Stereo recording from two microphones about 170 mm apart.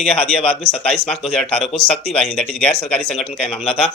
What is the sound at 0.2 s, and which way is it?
Speech, 35° left (ahead or behind).